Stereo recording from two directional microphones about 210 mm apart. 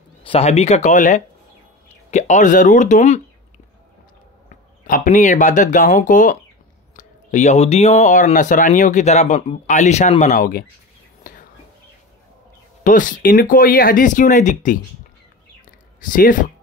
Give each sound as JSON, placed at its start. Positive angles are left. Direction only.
{"t": 0.2, "sound": "speech", "side_deg": 30}
{"t": 4.5, "sound": "speech", "side_deg": 40}
{"t": 11.3, "sound": "whispering", "side_deg": 40}
{"t": 12.8, "sound": "speech", "side_deg": 40}
{"t": 16.1, "sound": "speech", "side_deg": 40}